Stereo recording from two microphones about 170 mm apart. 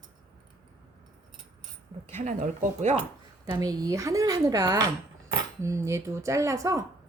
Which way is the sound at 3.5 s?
20° right (ahead or behind).